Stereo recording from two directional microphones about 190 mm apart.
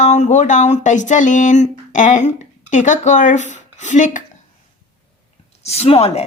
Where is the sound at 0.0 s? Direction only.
35° left (ahead or behind).